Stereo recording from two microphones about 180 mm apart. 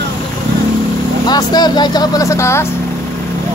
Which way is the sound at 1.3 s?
20° left (ahead or behind).